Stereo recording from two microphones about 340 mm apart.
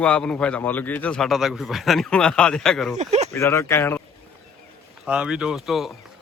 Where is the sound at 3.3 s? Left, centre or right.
Centre.